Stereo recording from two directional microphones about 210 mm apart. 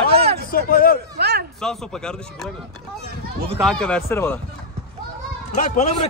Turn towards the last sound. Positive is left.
turn(degrees=30)  # may be behind; listen again after turning